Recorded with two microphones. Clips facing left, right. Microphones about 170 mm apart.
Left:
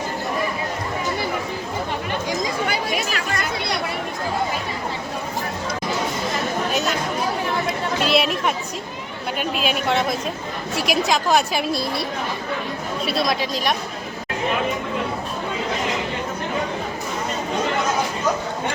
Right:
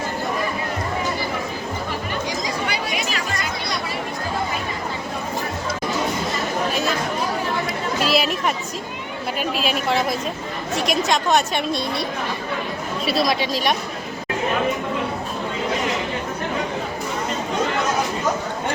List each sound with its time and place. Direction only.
2.4 s chatter: 45° left (ahead or behind)
8.0 s chatter: centre (ahead or behind)
9.4 s a woman's voice: centre (ahead or behind)
13.1 s a woman's voice: centre (ahead or behind)